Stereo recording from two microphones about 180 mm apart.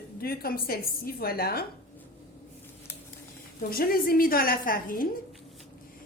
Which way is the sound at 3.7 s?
55° left (ahead or behind).